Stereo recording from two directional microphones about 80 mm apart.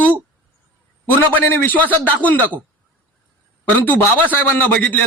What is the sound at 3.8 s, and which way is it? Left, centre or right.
A man's voice, left.